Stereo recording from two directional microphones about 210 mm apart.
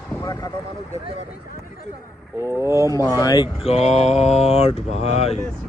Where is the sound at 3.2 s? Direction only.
15° left (ahead or behind).